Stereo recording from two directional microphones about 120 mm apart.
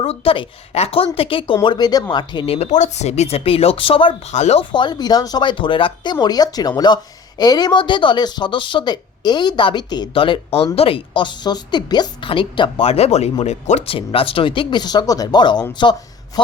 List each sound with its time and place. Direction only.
0.0 s speech: 55° left (ahead or behind)
1.6 s speech: 35° left (ahead or behind)
2.6 s speech: 80° left; by 4.1 s 50° left (ahead or behind)
4.3 s speech: 70° left (ahead or behind)
4.7 s speech: 40° left (ahead or behind)
12.8 s speech: 60° left (ahead or behind); by 16.4 s 35° left (ahead or behind)